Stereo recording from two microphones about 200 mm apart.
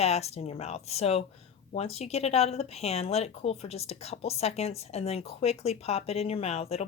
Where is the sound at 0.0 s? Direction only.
30° left (ahead or behind).